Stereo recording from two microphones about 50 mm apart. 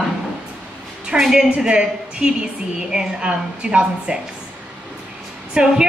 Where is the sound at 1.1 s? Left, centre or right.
Centre.